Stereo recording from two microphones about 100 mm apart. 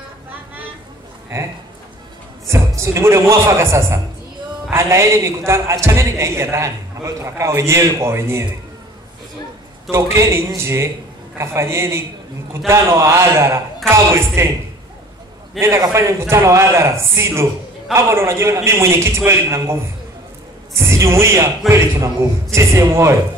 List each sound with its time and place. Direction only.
2.4 s a man's voice: 30° right (ahead or behind)
9.8 s a man's voice: 25° right (ahead or behind)
15.6 s a man's voice: 30° right (ahead or behind)